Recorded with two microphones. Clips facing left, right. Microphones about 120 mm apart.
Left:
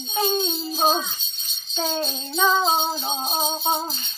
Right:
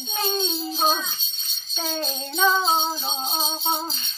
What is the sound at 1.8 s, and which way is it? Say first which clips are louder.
Music: left 3 dB; 15° left (ahead or behind).